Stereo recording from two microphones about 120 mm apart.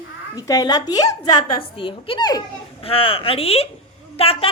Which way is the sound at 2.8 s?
50° left (ahead or behind).